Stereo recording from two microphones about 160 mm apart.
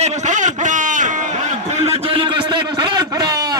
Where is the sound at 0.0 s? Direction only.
45° right (ahead or behind).